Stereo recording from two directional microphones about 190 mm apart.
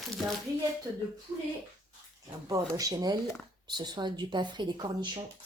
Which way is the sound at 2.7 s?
20° right (ahead or behind).